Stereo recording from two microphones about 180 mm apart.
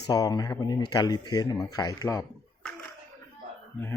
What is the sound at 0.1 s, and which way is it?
Speech, 20° left (ahead or behind).